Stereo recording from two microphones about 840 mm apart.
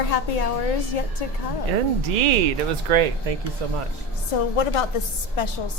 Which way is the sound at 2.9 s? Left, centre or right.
Right.